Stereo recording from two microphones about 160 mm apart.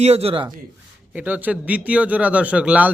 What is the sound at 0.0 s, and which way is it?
Speech, 40° right (ahead or behind).